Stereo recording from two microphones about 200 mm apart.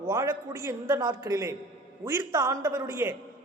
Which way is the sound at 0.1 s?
10° right (ahead or behind).